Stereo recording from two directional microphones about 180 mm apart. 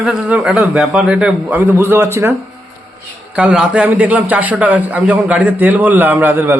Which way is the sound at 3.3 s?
5° right (ahead or behind).